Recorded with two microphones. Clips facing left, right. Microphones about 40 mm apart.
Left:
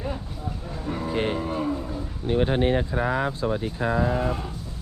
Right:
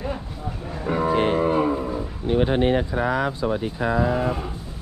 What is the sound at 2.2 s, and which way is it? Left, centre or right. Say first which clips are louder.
Speech: right 2 dB; right.